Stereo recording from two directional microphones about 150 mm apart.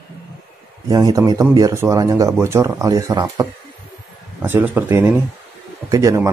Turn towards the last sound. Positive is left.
turn(degrees=-20)  # may be behind; listen again after turning